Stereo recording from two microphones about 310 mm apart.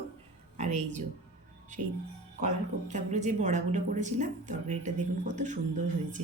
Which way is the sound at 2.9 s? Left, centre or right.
Right.